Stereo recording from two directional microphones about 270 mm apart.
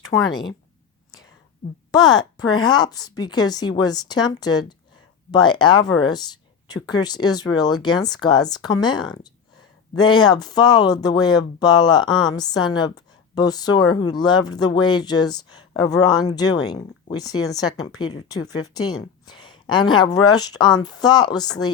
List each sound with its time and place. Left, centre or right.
0.1 s speech: left
1.9 s speech: centre